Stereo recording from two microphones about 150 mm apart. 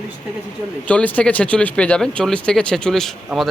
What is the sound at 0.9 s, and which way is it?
Speech, 10° left (ahead or behind).